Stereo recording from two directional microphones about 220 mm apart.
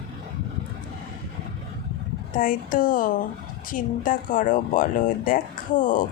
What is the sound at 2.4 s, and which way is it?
Speech, 40° left (ahead or behind).